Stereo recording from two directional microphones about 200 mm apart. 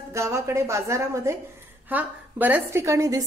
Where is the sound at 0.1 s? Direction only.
15° right (ahead or behind).